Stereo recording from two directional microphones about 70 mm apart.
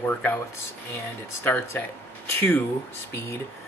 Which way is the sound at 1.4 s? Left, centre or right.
Left.